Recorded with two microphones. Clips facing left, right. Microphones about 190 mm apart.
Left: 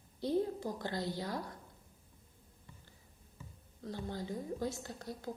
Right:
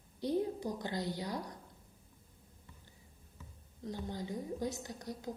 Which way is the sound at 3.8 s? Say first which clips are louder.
Even; 15° right (ahead or behind).